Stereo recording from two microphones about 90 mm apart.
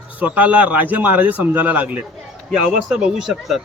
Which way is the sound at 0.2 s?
15° right (ahead or behind).